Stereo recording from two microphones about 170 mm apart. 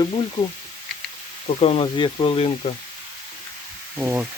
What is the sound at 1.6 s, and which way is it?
Speech, 35° left (ahead or behind).